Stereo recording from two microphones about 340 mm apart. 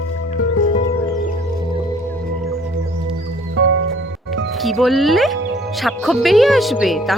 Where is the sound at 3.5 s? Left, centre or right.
Right.